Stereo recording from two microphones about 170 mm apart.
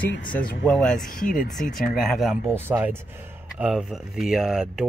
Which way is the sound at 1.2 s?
55° left (ahead or behind).